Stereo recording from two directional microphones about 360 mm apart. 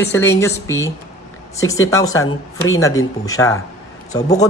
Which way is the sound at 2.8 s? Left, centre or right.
Centre.